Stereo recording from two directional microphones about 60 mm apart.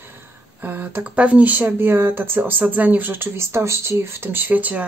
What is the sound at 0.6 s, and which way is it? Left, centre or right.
Speech, right.